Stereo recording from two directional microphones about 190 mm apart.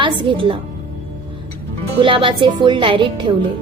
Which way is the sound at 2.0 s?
25° right (ahead or behind).